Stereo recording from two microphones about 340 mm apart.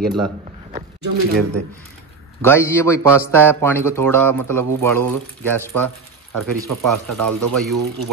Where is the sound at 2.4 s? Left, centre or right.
Centre.